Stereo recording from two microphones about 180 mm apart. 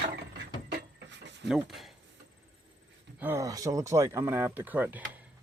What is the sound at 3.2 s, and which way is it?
Speech, 15° right (ahead or behind).